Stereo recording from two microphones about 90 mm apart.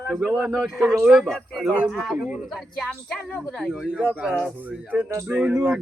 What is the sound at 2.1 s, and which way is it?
Speech, 15° right (ahead or behind).